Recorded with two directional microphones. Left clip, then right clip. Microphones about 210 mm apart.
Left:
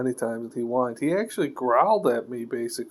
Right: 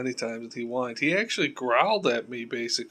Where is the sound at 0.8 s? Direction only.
25° left (ahead or behind).